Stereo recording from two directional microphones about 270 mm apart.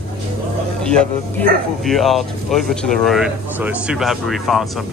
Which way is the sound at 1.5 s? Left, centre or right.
Right.